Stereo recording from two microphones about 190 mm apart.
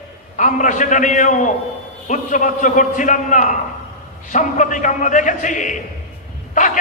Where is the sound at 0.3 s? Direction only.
40° left (ahead or behind).